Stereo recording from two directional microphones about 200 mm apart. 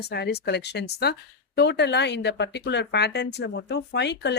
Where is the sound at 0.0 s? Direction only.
55° left (ahead or behind).